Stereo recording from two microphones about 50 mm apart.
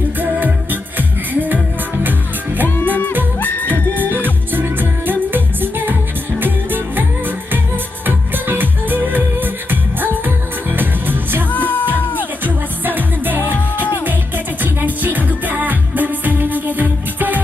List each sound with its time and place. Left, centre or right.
0.2 s music: right
2.6 s music: left
4.1 s music: right
11.5 s music: left
12.4 s music: right